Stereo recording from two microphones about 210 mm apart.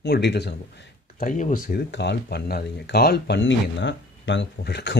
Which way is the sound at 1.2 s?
40° left (ahead or behind).